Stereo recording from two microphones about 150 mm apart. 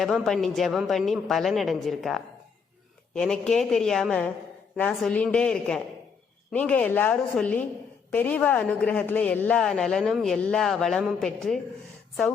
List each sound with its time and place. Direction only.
0.0 s a woman's voice: centre (ahead or behind)